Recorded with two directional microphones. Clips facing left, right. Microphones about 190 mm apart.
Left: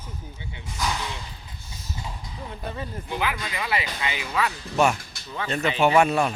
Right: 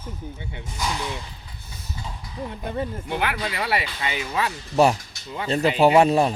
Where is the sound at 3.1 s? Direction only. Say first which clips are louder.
Right 1 dB; 60° right (ahead or behind).